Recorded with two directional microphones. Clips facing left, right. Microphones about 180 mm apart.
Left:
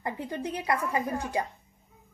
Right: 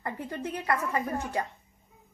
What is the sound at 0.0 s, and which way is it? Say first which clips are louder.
A woman's voice: left 2 dB; 15° left (ahead or behind).